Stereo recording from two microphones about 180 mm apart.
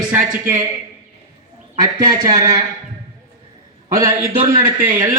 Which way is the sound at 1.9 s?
25° right (ahead or behind).